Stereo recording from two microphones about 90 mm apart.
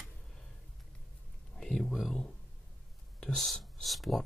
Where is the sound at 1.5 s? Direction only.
5° left (ahead or behind).